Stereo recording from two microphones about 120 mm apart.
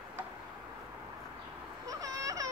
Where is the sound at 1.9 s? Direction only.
30° right (ahead or behind).